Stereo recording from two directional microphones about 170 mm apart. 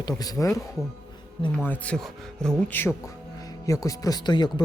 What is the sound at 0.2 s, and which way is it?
Speech, 20° left (ahead or behind).